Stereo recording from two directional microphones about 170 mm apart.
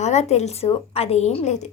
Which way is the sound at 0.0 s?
40° left (ahead or behind).